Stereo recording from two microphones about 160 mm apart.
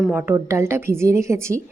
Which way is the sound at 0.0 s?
10° right (ahead or behind).